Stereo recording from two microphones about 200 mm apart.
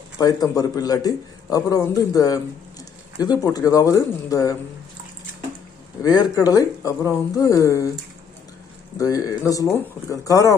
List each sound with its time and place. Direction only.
0.2 s a man's voice: 20° left (ahead or behind)
6.0 s a man's voice: 20° left (ahead or behind)
9.0 s a man's voice: 15° left (ahead or behind)